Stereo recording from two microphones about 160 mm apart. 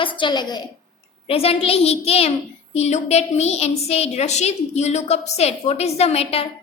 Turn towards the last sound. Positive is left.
turn(degrees=40)  # may be behind; listen again after turning